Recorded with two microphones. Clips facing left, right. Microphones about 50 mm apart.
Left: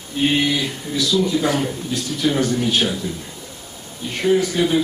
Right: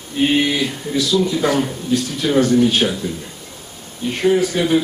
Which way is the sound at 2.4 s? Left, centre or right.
Right.